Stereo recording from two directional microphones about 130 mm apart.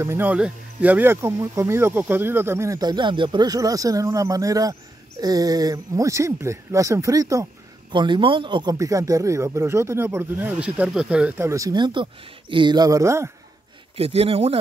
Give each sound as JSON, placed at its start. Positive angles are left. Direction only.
{"t": 0.0, "sound": "speech", "side_deg": -15}
{"t": 7.9, "sound": "speech", "side_deg": -35}
{"t": 8.7, "sound": "speech", "side_deg": -25}
{"t": 11.3, "sound": "speech", "side_deg": -25}
{"t": 13.9, "sound": "speech", "side_deg": -50}